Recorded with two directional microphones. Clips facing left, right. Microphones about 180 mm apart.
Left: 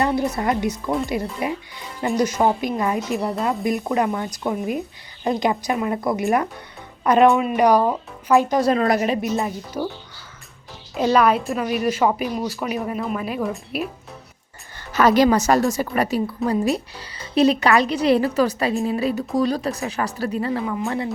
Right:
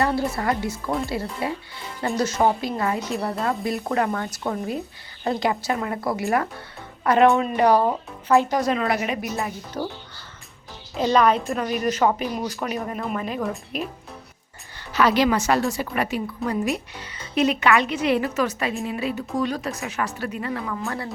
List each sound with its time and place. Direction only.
0.0 s a woman's voice: 20° left (ahead or behind)
8.6 s a woman's voice: 40° left (ahead or behind)
9.2 s a woman's voice: 20° left (ahead or behind)
10.9 s a woman's voice: 10° left (ahead or behind)
14.9 s a woman's voice: 45° left (ahead or behind); by 21.1 s 20° left (ahead or behind)